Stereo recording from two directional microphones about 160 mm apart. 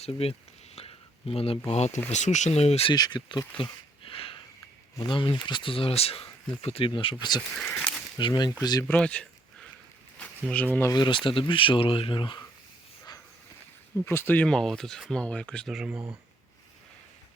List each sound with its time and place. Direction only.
0.0 s speech: 40° left (ahead or behind)
2.9 s speech: 25° left (ahead or behind)
7.5 s speech: 5° left (ahead or behind)
8.2 s speech: 25° left (ahead or behind)
8.9 s a sound: 5° left (ahead or behind)
10.9 s speech: 30° left (ahead or behind)
13.9 s speech: 15° left (ahead or behind); by 16.0 s 5° right (ahead or behind)